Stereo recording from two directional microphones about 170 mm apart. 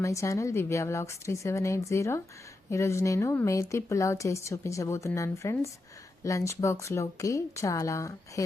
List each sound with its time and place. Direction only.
0.0 s speech: 20° left (ahead or behind)